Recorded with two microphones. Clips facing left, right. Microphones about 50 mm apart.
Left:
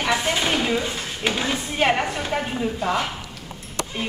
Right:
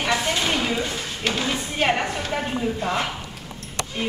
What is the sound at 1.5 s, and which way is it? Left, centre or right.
A woman's voice, centre.